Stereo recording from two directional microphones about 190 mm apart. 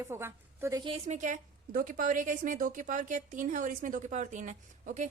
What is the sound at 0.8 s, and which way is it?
A woman's voice, 35° right (ahead or behind).